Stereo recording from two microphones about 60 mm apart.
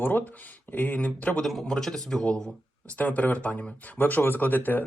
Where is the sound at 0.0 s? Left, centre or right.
Left.